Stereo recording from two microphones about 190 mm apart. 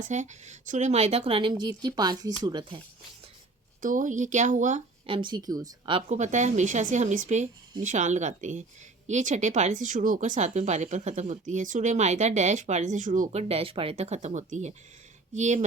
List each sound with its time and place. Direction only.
0.0 s a woman's voice: 40° right (ahead or behind)
3.8 s speech: 45° right (ahead or behind)
5.0 s a woman's voice: 25° right (ahead or behind)
6.1 s speech: 40° right (ahead or behind)